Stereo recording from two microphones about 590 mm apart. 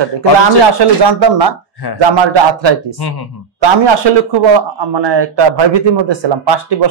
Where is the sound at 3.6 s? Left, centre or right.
Right.